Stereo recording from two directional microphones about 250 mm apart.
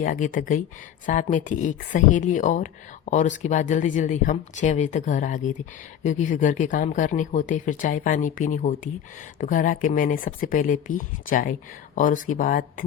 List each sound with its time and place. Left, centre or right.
0.0 s speech: left